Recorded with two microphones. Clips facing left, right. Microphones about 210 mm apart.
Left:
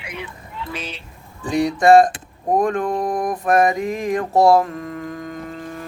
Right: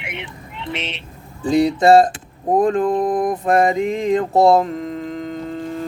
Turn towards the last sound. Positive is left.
turn(degrees=-25)  # may be behind; listen again after turning